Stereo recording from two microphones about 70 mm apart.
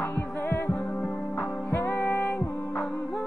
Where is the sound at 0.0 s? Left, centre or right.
Left.